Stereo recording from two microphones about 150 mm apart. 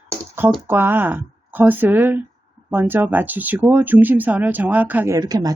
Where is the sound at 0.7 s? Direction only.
15° right (ahead or behind).